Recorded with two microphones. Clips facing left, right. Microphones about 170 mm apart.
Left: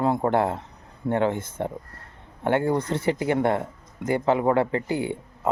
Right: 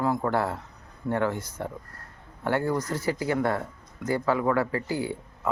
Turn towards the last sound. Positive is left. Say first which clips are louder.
# left 3 dB
turn(degrees=20)  # may be behind; listen again after turning